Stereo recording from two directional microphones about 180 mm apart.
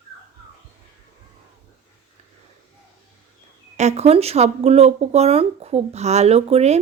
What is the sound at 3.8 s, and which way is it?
Speech, 35° right (ahead or behind).